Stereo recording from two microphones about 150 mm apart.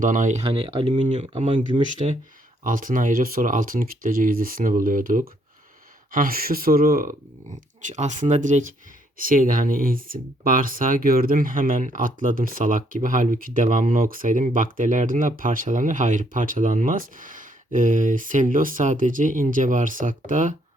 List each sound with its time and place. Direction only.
0.0 s speech: 60° right (ahead or behind); by 1.0 s 40° right (ahead or behind)
1.0 s speech: 50° right (ahead or behind)
2.6 s speech: 65° right (ahead or behind)
7.9 s speech: 50° right (ahead or behind)